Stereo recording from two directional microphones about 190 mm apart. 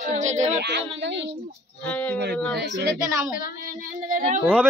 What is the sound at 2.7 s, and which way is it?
Speech, 15° right (ahead or behind).